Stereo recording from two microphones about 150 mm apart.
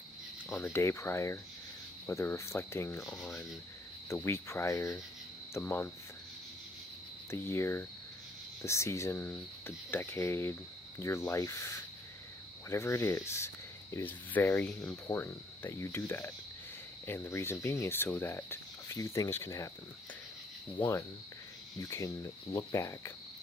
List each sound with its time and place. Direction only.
0.4 s speech: 15° left (ahead or behind)
7.3 s speech: 15° left (ahead or behind)
11.0 s cricket: 20° left (ahead or behind)
12.6 s speech: 20° left (ahead or behind)
20.8 s speech: 10° left (ahead or behind)
21.8 s cricket: 20° left (ahead or behind)